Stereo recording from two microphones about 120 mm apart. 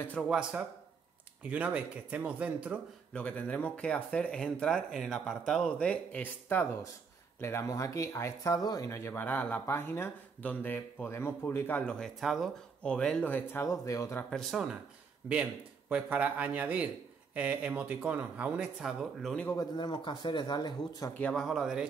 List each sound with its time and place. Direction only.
0.3 s speech: 10° right (ahead or behind)
3.1 s speech: 10° left (ahead or behind)
12.8 s speech: 10° left (ahead or behind); by 14.2 s 25° left (ahead or behind)
14.3 s speech: centre (ahead or behind)
15.9 s speech: 10° right (ahead or behind)
19.5 s speech: 30° left (ahead or behind)
19.9 s speech: 40° left (ahead or behind)
21.2 s speech: 10° left (ahead or behind)
21.5 s speech: centre (ahead or behind)